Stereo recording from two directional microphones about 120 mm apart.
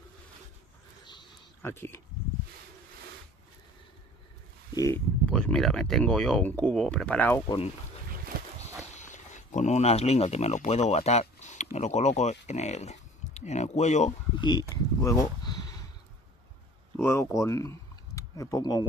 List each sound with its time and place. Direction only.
1.6 s speech: 20° left (ahead or behind)
4.9 s speech: 10° left (ahead or behind)
8.9 s speech: 90° left; by 14.1 s 75° left (ahead or behind)
14.4 s speech: 35° left (ahead or behind)
16.9 s speech: 20° left (ahead or behind)